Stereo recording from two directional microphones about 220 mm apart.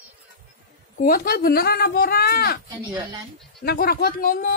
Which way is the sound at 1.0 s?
40° left (ahead or behind).